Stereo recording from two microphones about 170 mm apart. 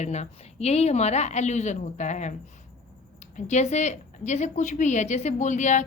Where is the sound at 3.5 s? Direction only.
40° left (ahead or behind).